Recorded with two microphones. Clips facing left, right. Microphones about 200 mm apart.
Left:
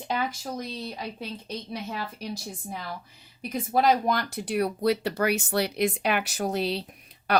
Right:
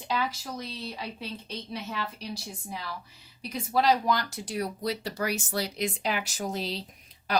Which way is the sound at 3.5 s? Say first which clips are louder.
Left 2 dB; 50° left (ahead or behind).